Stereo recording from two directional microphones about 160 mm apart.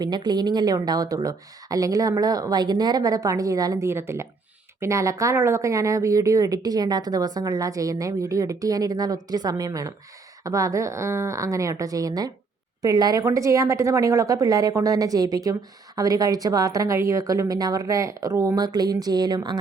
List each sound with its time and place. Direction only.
0.0 s speech: 25° right (ahead or behind)